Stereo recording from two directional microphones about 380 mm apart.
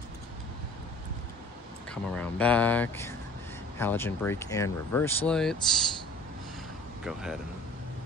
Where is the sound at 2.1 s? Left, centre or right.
Centre.